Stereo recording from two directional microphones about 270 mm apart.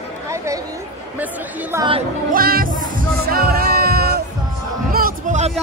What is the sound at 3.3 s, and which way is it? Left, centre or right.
Music, right.